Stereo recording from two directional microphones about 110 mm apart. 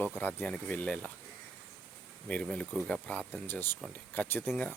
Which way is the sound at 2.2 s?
10° left (ahead or behind).